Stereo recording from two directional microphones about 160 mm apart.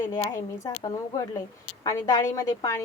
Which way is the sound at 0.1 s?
25° left (ahead or behind).